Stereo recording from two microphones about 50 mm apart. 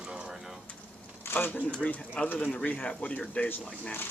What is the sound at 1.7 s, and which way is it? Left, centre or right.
Speech, left.